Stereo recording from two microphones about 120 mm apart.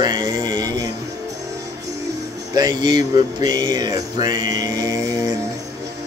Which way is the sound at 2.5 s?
35° right (ahead or behind).